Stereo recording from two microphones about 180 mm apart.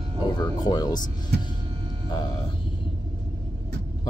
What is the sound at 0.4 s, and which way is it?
Speech, 20° left (ahead or behind).